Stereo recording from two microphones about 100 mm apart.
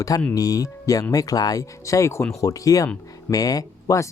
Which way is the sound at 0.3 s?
35° left (ahead or behind).